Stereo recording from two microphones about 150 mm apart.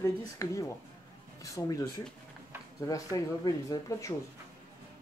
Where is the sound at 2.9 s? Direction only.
25° left (ahead or behind).